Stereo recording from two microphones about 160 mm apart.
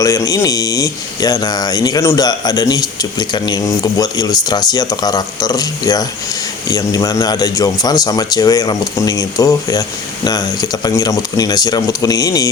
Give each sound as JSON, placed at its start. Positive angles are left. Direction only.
{"t": 0.0, "sound": "speech", "side_deg": 20}